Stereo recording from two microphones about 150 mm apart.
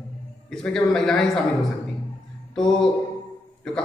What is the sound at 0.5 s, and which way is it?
Speech, 5° left (ahead or behind).